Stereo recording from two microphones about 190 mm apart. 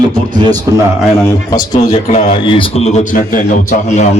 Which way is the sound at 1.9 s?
35° left (ahead or behind).